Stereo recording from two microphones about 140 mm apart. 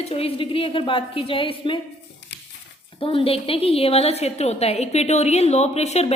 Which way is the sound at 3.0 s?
40° left (ahead or behind).